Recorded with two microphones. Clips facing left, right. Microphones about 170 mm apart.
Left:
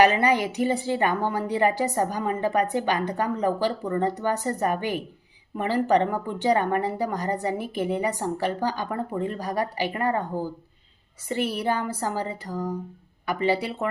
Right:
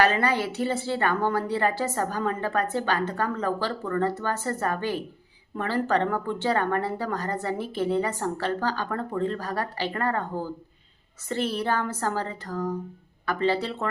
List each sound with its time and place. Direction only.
0.0 s a woman's voice: 15° left (ahead or behind)